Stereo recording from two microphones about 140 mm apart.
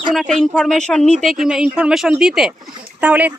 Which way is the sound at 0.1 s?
Centre (ahead or behind).